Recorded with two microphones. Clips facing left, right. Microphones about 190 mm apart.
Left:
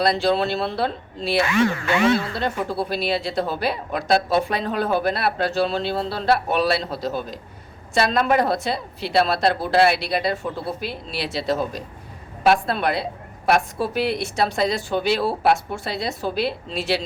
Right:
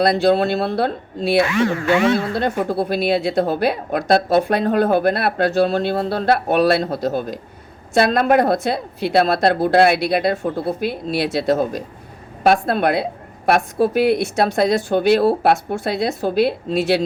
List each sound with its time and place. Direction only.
0.0 s speech: 50° right (ahead or behind)